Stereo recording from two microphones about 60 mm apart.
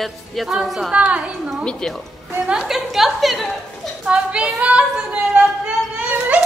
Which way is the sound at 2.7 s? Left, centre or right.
Centre.